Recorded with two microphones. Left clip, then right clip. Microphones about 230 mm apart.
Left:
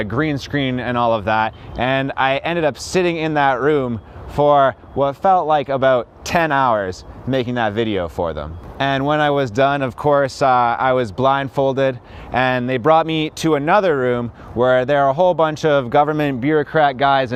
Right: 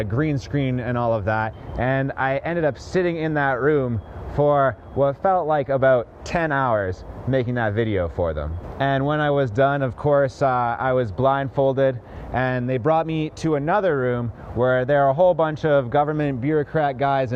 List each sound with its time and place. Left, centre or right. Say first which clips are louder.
0.0 s speech: left 4 dB; left